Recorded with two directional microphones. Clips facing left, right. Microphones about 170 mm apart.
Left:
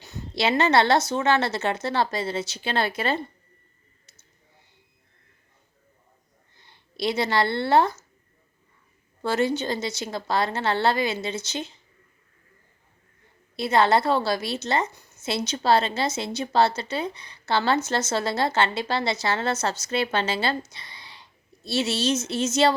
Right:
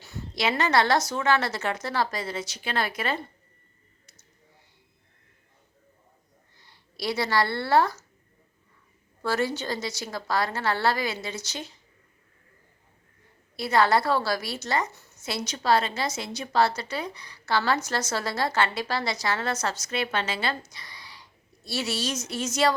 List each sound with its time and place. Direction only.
0.0 s a woman's voice: 25° left (ahead or behind)
6.6 s speech: 20° left (ahead or behind)
9.2 s a woman's voice: 20° left (ahead or behind)
13.6 s a woman's voice: 25° left (ahead or behind)